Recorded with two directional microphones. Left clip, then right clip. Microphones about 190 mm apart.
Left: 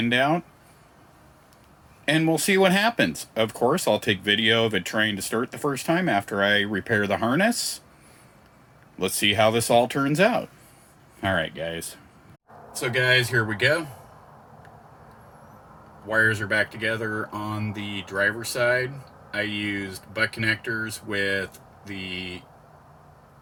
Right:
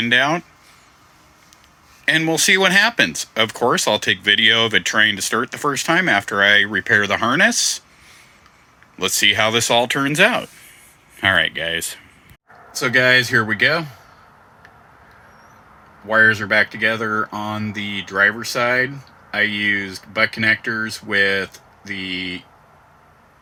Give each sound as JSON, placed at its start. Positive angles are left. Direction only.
{"t": 0.0, "sound": "speech", "side_deg": 10}
{"t": 2.0, "sound": "speech", "side_deg": 10}
{"t": 9.0, "sound": "speech", "side_deg": 10}
{"t": 12.7, "sound": "speech", "side_deg": -5}
{"t": 16.0, "sound": "speech", "side_deg": -5}